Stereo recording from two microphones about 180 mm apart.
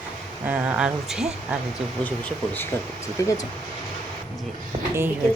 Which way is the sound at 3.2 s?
15° left (ahead or behind).